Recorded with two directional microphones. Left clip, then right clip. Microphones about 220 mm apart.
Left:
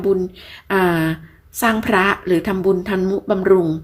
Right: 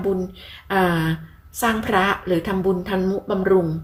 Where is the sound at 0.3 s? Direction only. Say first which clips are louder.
Left 2 dB; 45° left (ahead or behind).